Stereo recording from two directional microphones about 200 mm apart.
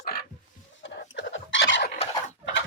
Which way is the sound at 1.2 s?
65° left (ahead or behind).